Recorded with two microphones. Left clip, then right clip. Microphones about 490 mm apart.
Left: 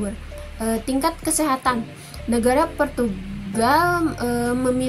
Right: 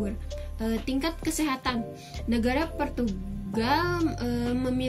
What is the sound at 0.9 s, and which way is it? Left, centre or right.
Speech, right.